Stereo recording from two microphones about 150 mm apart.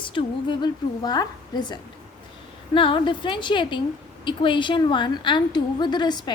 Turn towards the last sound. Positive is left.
turn(degrees=30)  # may be behind; listen again after turning